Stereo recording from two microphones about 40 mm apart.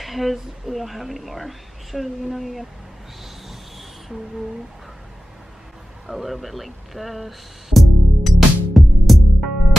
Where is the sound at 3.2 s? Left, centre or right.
Centre.